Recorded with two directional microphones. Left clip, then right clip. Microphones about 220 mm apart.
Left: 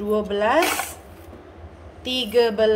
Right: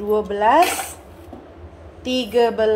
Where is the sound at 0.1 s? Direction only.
Centre (ahead or behind).